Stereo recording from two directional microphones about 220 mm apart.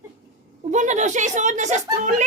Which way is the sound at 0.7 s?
35° right (ahead or behind).